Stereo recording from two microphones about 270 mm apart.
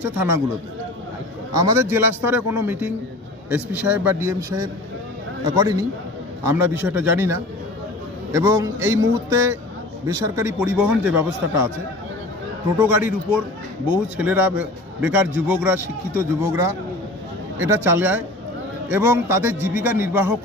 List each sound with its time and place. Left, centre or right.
1.6 s a man's voice: centre
12.7 s a man's voice: centre